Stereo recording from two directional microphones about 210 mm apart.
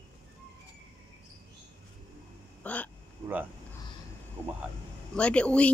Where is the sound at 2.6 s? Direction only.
5° left (ahead or behind).